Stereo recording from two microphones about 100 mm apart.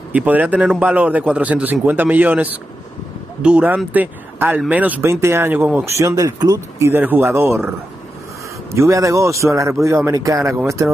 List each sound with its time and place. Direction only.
0.1 s a man's voice: 15° right (ahead or behind)
5.9 s a man's voice: 30° right (ahead or behind)
6.8 s speech: 20° right (ahead or behind)
8.7 s a man's voice: 30° right (ahead or behind)